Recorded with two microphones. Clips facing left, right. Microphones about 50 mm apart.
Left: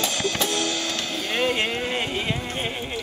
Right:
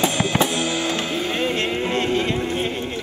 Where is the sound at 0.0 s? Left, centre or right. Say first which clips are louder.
Right 5 dB; centre.